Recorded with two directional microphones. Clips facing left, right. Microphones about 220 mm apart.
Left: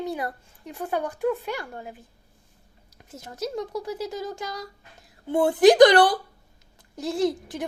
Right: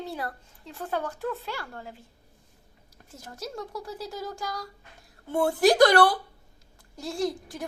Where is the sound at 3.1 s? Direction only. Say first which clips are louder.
Left 7 dB; 20° left (ahead or behind).